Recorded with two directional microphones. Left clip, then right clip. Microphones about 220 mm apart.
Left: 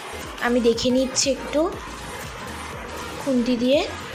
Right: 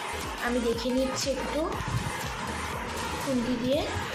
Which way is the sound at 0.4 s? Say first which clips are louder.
Left 9 dB; 35° left (ahead or behind).